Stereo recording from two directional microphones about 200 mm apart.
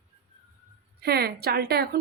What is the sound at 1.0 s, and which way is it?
Speech, 50° right (ahead or behind).